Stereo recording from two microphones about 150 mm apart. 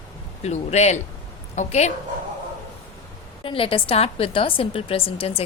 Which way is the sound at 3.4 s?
35° left (ahead or behind).